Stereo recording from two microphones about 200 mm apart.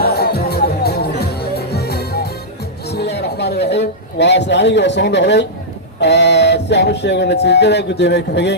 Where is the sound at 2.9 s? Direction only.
55° left (ahead or behind).